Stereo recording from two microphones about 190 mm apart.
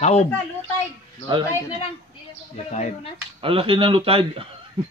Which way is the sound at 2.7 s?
35° left (ahead or behind).